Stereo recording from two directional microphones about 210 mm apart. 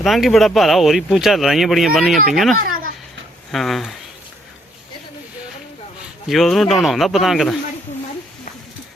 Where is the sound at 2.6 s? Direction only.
40° right (ahead or behind).